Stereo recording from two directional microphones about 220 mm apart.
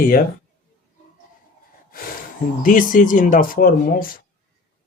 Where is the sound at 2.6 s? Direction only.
40° left (ahead or behind).